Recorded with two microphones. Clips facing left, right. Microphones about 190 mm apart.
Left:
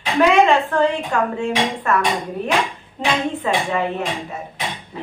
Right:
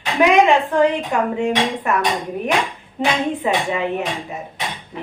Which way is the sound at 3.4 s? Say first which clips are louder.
Even; 15° right (ahead or behind).